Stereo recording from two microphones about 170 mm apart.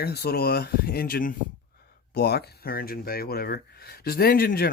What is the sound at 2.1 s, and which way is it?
Speech, 70° left (ahead or behind).